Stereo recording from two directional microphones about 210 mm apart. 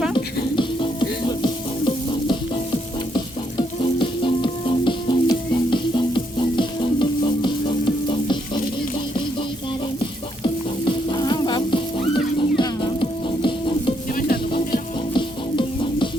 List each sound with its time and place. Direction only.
0.5 s music: 25° left (ahead or behind)
3.2 s frying: 20° left (ahead or behind)
10.0 s music: 20° left (ahead or behind)
14.1 s music: 40° left (ahead or behind)
15.1 s music: 20° left (ahead or behind)